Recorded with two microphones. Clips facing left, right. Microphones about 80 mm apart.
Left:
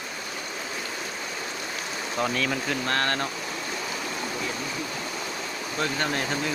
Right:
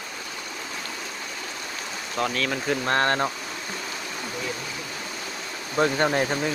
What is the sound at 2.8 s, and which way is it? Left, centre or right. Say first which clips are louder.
Speech: right 5 dB; right.